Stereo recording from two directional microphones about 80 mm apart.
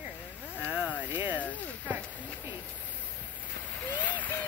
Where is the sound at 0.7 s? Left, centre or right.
Centre.